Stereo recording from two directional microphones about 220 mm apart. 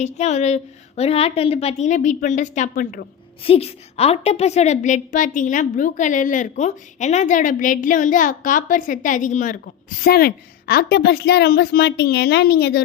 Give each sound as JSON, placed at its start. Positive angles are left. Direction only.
{"t": 0.0, "sound": "a woman's voice", "side_deg": 30}
{"t": 3.4, "sound": "a woman's voice", "side_deg": 25}